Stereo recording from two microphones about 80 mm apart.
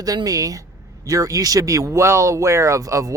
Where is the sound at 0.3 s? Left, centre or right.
Right.